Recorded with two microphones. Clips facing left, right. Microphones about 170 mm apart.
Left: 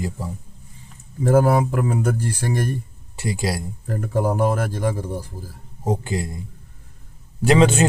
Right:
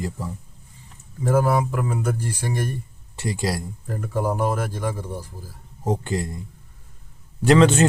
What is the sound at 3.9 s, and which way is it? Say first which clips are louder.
Speech: left 3 dB; 40° left (ahead or behind).